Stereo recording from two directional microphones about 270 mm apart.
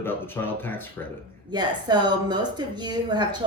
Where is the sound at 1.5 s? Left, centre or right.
Centre.